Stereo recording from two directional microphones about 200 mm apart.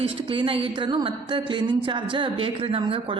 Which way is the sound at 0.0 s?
25° right (ahead or behind).